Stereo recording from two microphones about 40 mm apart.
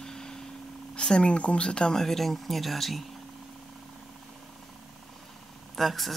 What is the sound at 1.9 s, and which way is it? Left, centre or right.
Speech, centre.